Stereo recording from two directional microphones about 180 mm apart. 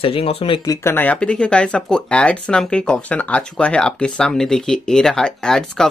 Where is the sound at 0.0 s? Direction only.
30° left (ahead or behind).